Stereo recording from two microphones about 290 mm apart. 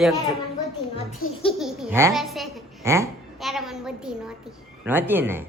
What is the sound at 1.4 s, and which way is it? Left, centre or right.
Babbling, centre.